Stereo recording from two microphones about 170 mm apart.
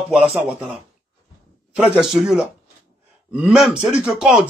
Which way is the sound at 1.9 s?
Centre (ahead or behind).